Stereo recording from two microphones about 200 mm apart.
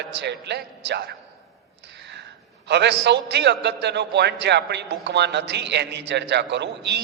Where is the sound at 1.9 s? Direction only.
60° right (ahead or behind).